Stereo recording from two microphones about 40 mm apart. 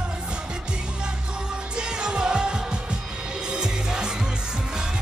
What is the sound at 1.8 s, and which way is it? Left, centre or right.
Music, right.